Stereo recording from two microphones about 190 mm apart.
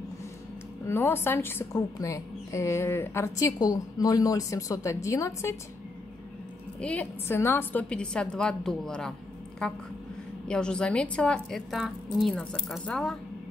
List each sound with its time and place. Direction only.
0.8 s a woman's voice: 10° left (ahead or behind)
6.8 s a woman's voice: 5° left (ahead or behind)